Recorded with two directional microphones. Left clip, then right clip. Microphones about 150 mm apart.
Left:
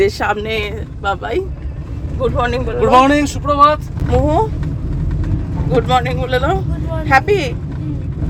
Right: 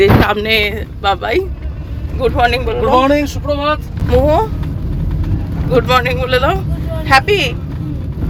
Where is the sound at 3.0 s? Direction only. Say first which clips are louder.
Left 2 dB; 20° left (ahead or behind).